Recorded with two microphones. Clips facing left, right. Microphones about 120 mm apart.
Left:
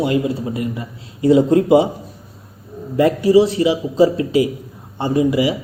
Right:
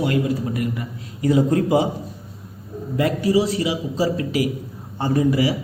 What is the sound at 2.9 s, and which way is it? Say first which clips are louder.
A man's voice: left 6 dB; 30° left (ahead or behind).